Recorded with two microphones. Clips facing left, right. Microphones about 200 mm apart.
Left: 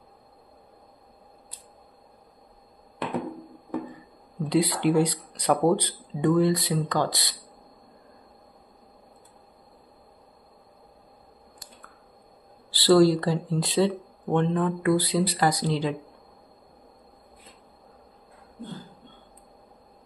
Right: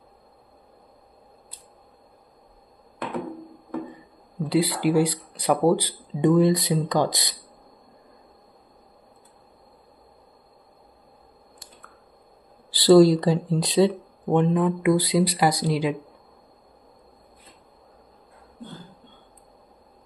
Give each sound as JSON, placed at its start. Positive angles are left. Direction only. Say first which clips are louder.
{"t": 4.4, "sound": "speech", "louder": "right 1 dB", "side_deg": 0}
{"t": 6.2, "sound": "speech", "louder": "right 3 dB", "side_deg": -20}
{"t": 12.7, "sound": "speech", "louder": "right 4 dB", "side_deg": -15}